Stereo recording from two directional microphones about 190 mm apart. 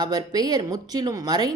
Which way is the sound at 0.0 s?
20° right (ahead or behind).